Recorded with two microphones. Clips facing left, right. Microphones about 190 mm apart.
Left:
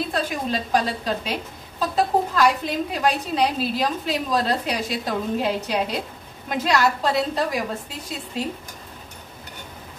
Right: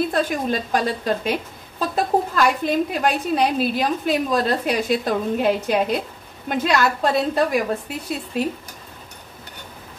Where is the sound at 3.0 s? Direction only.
55° right (ahead or behind).